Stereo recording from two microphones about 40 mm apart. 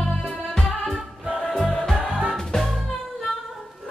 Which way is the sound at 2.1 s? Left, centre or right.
Right.